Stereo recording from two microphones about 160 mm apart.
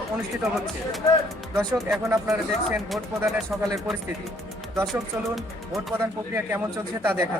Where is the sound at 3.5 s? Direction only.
5° right (ahead or behind).